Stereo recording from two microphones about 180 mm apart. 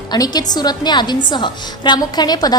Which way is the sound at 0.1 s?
20° left (ahead or behind).